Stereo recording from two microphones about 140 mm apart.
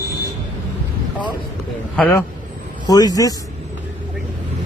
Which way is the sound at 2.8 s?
30° left (ahead or behind).